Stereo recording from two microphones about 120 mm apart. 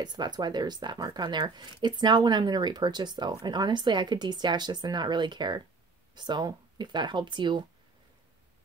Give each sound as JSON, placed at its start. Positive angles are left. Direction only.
{"t": 0.0, "sound": "speech", "side_deg": -35}